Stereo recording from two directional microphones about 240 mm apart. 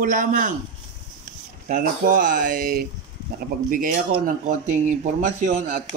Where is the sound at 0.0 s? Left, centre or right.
Right.